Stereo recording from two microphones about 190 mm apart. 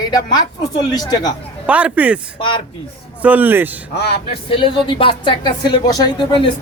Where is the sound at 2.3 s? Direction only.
25° left (ahead or behind).